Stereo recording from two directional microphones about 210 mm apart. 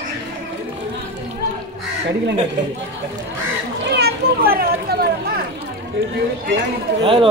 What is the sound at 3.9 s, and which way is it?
Children playing, 50° right (ahead or behind).